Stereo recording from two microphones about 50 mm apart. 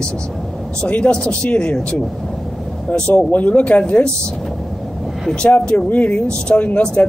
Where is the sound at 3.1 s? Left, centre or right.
Left.